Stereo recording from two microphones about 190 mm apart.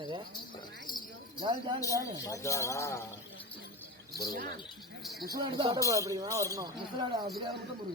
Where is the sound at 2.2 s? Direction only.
15° left (ahead or behind).